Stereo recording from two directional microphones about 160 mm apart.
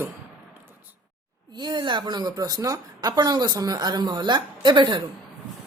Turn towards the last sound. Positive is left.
turn(degrees=-30)  # may be behind; listen again after turning